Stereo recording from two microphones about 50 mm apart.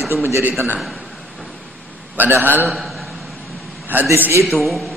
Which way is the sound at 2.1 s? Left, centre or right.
Right.